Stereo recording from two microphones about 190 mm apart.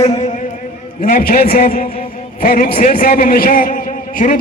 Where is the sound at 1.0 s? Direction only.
50° left (ahead or behind).